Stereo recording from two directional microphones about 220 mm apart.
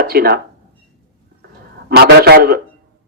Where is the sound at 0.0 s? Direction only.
45° right (ahead or behind).